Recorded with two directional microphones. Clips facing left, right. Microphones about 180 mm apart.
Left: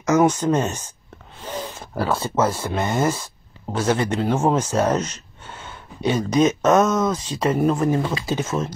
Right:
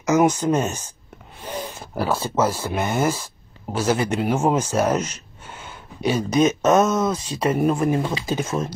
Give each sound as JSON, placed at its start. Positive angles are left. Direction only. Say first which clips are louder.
{"t": 0.0, "sound": "speech", "louder": "even", "side_deg": -10}
{"t": 1.4, "sound": "pig", "louder": "even", "side_deg": -15}
{"t": 2.3, "sound": "speech", "louder": "left 1 dB", "side_deg": -10}
{"t": 6.6, "sound": "speech", "louder": "even", "side_deg": -25}
{"t": 6.9, "sound": "speech", "louder": "left 1 dB", "side_deg": -10}